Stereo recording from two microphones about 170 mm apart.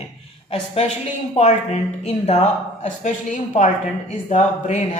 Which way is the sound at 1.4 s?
40° left (ahead or behind).